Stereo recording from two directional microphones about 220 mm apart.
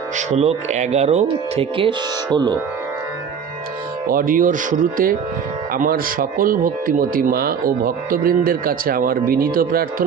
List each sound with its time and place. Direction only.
0.2 s speech: 30° right (ahead or behind)
4.1 s speech: 40° right (ahead or behind)